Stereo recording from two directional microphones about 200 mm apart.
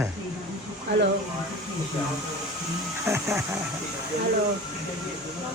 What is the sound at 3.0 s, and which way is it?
Speech, 15° right (ahead or behind).